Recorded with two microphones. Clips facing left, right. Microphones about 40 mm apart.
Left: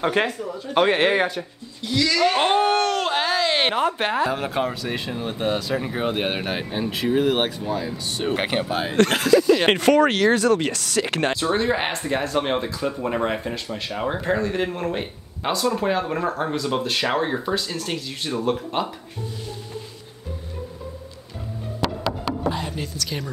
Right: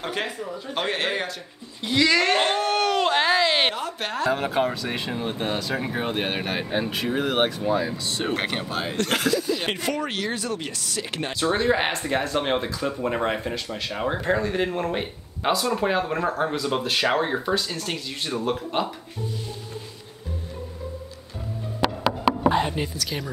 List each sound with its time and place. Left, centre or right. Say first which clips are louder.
0.0 s speech: left 7 dB; centre
0.5 s speech: left 2 dB; centre
0.7 s speech: left 8 dB; centre
1.8 s speech: right 1 dB; right
2.3 s speech: left 3 dB; left
2.8 s a sound: right 1 dB; centre
4.3 s speech: right 1 dB; centre
7.6 s speech: right 3 dB; centre
8.4 s speech: left 4 dB; centre
9.3 s speech: left 9 dB; left
11.3 s speech: even; centre
21.8 s music: right 3 dB; centre
22.4 s a sound: right 5 dB; right
22.9 s speech: left 1 dB; centre